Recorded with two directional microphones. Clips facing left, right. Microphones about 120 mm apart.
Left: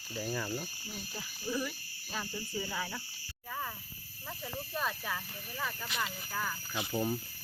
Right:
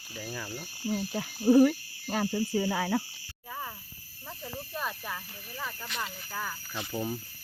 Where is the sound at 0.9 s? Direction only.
70° right (ahead or behind).